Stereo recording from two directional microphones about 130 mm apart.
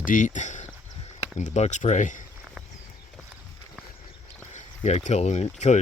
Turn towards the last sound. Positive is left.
turn(degrees=60)  # may be behind; listen again after turning